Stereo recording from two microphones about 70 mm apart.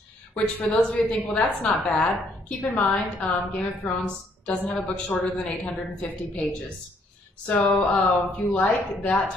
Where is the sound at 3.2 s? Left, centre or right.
Left.